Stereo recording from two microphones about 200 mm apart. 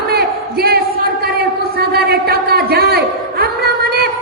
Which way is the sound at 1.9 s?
50° right (ahead or behind).